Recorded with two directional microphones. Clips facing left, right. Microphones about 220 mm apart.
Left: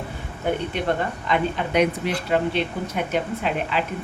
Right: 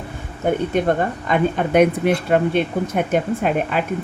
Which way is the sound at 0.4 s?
45° right (ahead or behind).